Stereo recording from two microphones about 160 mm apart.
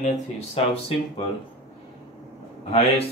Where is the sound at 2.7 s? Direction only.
40° left (ahead or behind).